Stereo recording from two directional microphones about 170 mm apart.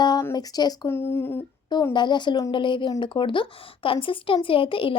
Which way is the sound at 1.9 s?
25° left (ahead or behind).